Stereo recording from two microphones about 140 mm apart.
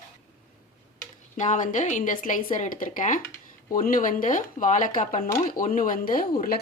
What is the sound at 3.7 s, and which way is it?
Speech, 80° left.